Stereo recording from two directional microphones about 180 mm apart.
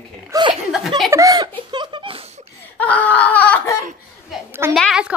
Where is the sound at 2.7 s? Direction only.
10° left (ahead or behind).